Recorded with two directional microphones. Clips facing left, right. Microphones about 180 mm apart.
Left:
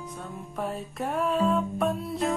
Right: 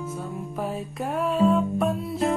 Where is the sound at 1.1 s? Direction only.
Centre (ahead or behind).